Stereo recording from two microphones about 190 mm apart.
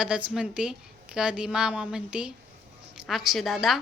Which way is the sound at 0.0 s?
5° right (ahead or behind).